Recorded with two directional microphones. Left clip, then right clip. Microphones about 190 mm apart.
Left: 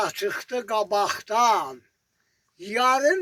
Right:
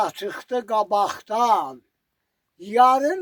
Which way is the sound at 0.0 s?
70° right (ahead or behind).